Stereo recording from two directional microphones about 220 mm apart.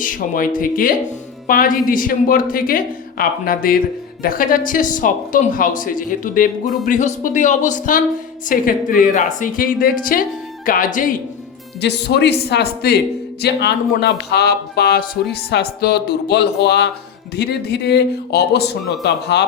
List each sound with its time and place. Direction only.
0.0 s speech: 40° left (ahead or behind)
11.8 s speech: 50° left (ahead or behind)